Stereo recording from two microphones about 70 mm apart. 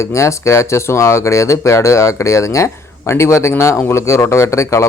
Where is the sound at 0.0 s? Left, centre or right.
Left.